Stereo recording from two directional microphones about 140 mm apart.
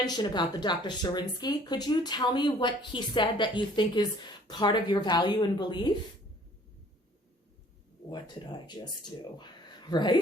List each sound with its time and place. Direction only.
0.0 s speech: 30° left (ahead or behind)
8.1 s speech: 35° left (ahead or behind)
9.4 s a sound: 30° left (ahead or behind)